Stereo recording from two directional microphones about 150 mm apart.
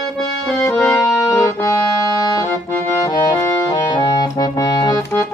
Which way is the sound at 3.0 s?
30° left (ahead or behind).